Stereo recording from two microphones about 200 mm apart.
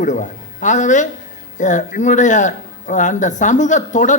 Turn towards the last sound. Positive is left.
turn(degrees=40)  # may be behind; listen again after turning